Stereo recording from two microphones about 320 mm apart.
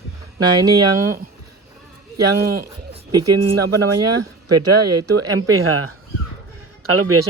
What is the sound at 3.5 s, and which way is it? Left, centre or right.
Speech, right.